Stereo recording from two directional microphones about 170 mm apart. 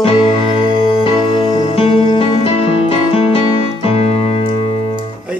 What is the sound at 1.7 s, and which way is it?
Music, 35° left (ahead or behind).